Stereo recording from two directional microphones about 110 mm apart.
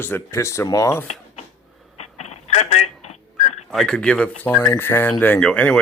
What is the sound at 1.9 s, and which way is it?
Telephone, 85° left.